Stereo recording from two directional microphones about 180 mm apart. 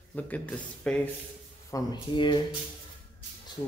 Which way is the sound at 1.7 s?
20° left (ahead or behind).